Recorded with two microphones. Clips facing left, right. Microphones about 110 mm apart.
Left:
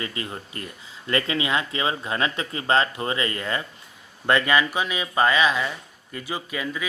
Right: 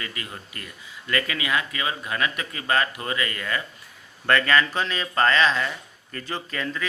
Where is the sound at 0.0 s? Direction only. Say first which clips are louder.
Left 4 dB; 25° left (ahead or behind).